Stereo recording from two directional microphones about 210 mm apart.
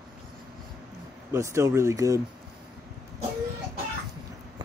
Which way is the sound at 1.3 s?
15° right (ahead or behind).